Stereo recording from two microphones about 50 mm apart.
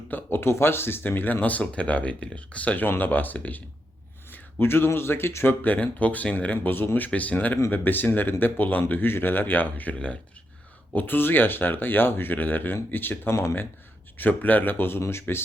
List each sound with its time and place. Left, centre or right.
0.1 s speech: left
4.6 s speech: left
5.6 s speech: left
6.7 s speech: left
7.1 s speech: left
10.9 s speech: left
14.2 s speech: left